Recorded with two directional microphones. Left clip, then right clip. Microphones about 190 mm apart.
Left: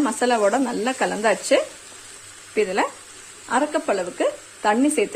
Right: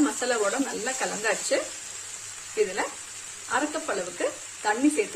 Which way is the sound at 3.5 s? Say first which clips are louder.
Left 7 dB; 45° left (ahead or behind).